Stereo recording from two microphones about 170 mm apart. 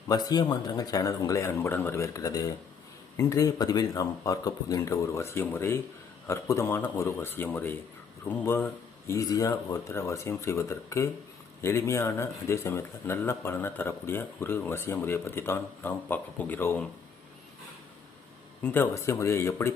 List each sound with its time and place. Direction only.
0.1 s speech: 25° left (ahead or behind)
18.6 s speech: 15° left (ahead or behind)